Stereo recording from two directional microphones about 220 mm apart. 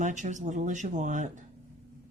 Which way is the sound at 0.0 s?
35° right (ahead or behind).